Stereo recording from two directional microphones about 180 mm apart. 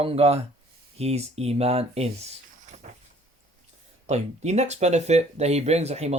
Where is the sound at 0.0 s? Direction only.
35° right (ahead or behind).